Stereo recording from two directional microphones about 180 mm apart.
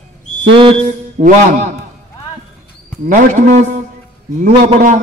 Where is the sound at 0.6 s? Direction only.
30° right (ahead or behind).